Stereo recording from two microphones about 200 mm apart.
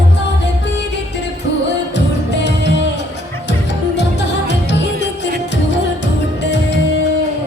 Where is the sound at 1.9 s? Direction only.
60° left (ahead or behind).